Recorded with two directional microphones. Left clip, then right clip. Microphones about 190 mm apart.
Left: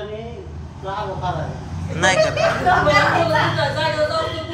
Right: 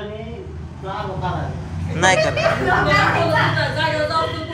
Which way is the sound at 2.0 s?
15° left (ahead or behind).